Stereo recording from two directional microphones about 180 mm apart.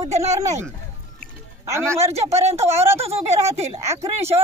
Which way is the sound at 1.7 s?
15° right (ahead or behind).